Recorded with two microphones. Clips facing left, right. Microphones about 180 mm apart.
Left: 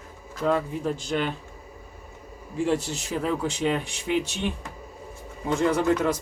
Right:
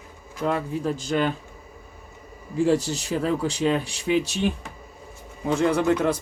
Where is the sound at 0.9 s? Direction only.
40° right (ahead or behind).